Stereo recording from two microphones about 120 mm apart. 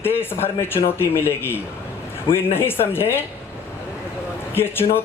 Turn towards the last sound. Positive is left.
turn(degrees=20)  # may be behind; listen again after turning